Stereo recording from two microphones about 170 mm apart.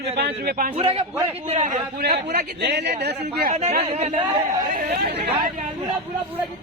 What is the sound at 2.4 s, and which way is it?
Speech, 75° right (ahead or behind).